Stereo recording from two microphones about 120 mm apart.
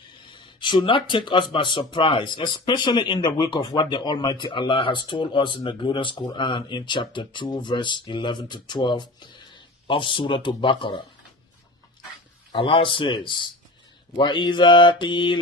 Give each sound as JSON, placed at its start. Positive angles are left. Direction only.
{"t": 0.3, "sound": "speech", "side_deg": 40}
{"t": 12.5, "sound": "speech", "side_deg": 45}